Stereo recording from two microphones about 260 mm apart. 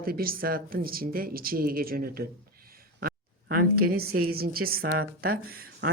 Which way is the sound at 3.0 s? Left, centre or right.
Right.